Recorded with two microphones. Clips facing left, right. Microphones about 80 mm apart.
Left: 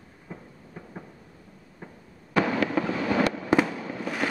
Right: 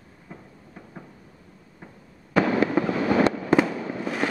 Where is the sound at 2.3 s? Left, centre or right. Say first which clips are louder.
Right 3 dB; right.